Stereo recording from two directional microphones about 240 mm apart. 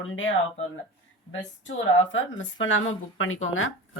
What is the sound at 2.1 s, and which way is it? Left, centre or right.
Speech, left.